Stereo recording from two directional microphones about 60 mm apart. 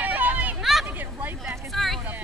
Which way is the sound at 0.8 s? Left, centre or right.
Right.